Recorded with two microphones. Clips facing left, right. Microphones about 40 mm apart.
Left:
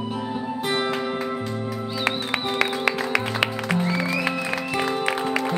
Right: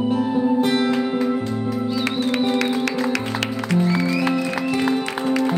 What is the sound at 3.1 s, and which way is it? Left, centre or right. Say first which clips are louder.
Music: left 1 dB; centre.